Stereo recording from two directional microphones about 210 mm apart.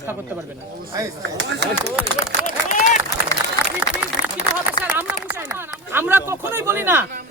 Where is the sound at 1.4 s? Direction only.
55° right (ahead or behind).